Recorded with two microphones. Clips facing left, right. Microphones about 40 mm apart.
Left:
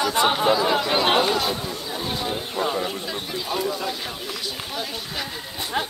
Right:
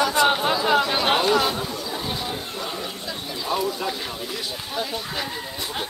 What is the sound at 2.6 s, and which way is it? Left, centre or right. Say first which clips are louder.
Speech: left 6 dB; left.